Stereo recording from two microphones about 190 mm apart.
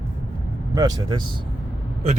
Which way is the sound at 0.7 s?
20° right (ahead or behind).